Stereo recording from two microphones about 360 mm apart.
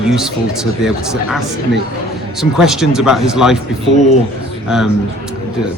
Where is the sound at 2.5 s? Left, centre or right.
Centre.